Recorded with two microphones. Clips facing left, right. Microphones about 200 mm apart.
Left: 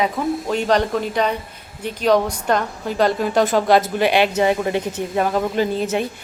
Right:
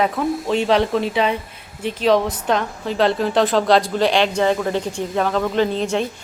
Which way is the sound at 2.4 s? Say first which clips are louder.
Even; centre (ahead or behind).